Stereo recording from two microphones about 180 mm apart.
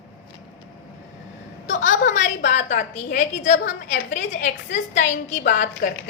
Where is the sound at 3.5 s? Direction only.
75° left (ahead or behind).